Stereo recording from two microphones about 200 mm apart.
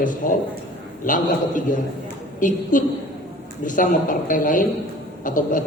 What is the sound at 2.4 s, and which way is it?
A woman's voice, 40° left (ahead or behind).